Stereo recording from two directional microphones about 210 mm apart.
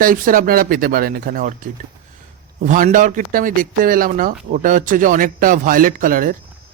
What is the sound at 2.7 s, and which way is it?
Speech, 40° right (ahead or behind).